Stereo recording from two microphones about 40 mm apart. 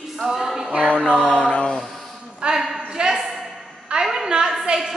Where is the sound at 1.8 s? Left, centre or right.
Centre.